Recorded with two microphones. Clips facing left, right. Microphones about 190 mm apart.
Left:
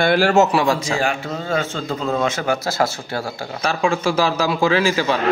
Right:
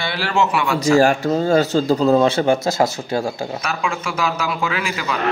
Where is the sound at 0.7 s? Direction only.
40° right (ahead or behind); by 3.2 s 20° right (ahead or behind).